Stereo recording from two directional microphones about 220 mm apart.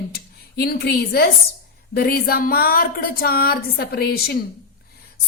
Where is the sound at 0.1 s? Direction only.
45° left (ahead or behind).